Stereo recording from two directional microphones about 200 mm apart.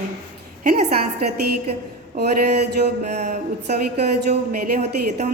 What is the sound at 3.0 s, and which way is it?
A woman's voice, 40° right (ahead or behind).